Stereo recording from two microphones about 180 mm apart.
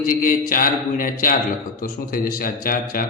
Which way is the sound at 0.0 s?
50° left (ahead or behind).